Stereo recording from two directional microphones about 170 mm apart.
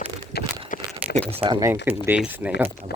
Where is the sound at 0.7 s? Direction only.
50° left (ahead or behind).